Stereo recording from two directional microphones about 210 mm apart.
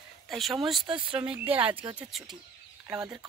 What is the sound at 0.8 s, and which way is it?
Speech, 25° right (ahead or behind).